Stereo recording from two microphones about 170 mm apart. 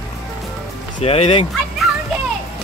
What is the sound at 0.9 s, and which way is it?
Speech, 35° left (ahead or behind).